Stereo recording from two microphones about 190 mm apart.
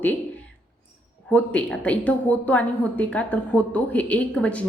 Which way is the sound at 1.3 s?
5° left (ahead or behind).